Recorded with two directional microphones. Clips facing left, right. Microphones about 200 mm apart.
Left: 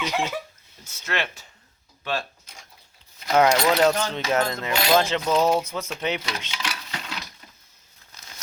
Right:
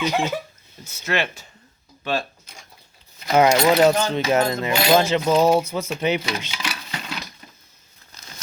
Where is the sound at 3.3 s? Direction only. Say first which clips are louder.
Right 3 dB; 10° right (ahead or behind).